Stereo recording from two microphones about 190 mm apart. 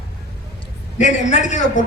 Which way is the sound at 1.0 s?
40° left (ahead or behind).